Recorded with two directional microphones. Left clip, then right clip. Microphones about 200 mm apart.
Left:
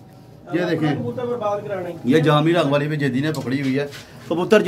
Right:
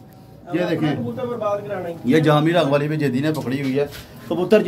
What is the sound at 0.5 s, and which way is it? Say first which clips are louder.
Speech: even; 5° left (ahead or behind).